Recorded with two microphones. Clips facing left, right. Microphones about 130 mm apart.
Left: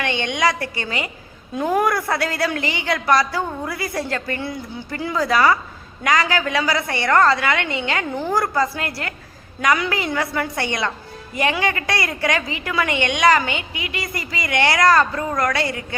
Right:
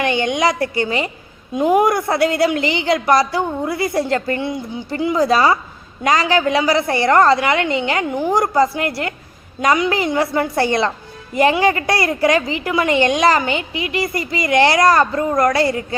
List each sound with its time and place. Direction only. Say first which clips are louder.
0.2 s a woman's voice: right 4 dB; 25° right (ahead or behind)